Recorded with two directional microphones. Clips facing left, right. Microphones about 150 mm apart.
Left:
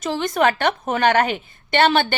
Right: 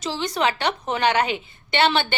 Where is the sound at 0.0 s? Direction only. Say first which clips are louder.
Left 4 dB; 50° left (ahead or behind).